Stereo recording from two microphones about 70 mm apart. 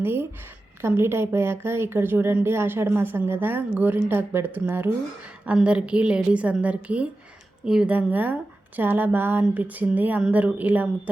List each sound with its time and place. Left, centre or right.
0.0 s a woman's voice: right
5.5 s a woman's voice: centre
7.9 s a woman's voice: right